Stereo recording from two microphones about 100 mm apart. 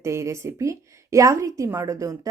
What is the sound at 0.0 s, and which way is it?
Speech, 30° right (ahead or behind).